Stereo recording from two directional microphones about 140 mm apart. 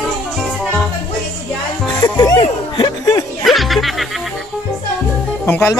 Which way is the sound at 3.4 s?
Centre (ahead or behind).